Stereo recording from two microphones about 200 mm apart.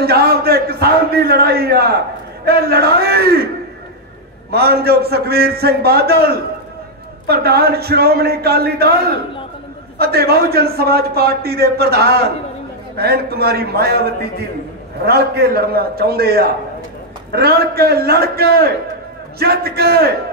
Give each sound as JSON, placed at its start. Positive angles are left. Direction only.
{"t": 0.0, "sound": "a sound", "side_deg": -50}
{"t": 2.4, "sound": "a man's voice", "side_deg": -50}
{"t": 4.5, "sound": "a man's voice", "side_deg": -50}
{"t": 9.9, "sound": "a man's voice", "side_deg": -50}
{"t": 15.0, "sound": "a man's voice", "side_deg": -50}